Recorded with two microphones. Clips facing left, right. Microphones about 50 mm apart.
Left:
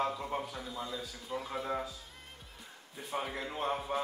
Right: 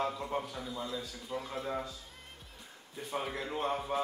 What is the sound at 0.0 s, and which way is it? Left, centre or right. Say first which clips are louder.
Speech: even; centre.